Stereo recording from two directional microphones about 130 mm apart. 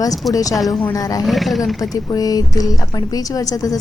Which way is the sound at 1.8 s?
30° left (ahead or behind).